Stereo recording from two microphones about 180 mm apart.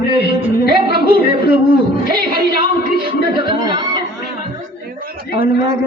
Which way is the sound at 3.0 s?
25° right (ahead or behind).